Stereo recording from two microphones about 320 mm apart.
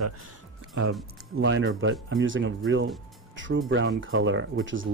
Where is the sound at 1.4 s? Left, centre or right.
Right.